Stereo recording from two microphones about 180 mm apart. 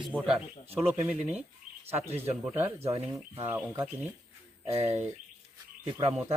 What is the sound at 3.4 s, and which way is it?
Speech, 10° right (ahead or behind).